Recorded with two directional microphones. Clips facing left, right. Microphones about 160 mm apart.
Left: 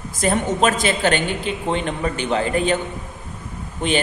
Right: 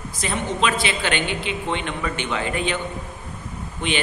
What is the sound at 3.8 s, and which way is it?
Speech, 40° left (ahead or behind).